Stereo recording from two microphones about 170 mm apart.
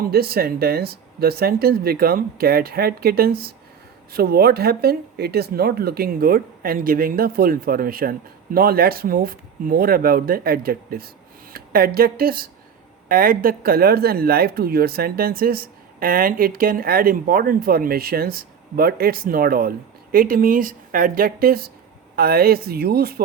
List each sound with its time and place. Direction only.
0.0 s speech: 65° right (ahead or behind)